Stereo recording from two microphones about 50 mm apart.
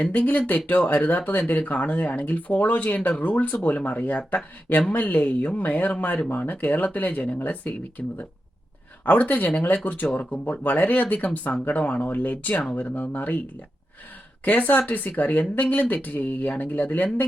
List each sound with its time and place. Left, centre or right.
0.0 s speech: left
14.4 s speech: left